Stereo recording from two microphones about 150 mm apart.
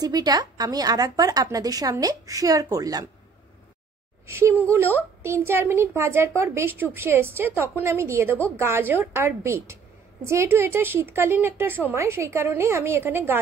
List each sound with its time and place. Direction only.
0.0 s a woman's voice: 25° right (ahead or behind)
4.3 s speech: 15° right (ahead or behind)